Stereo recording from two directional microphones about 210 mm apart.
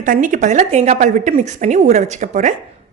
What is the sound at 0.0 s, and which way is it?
A woman's voice, 40° right (ahead or behind).